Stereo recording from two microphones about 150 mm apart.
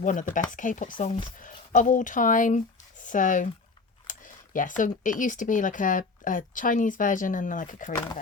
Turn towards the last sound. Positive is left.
turn(degrees=60)  # may be behind; listen again after turning